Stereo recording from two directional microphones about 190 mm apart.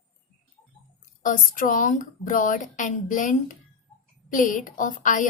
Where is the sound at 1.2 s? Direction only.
45° left (ahead or behind).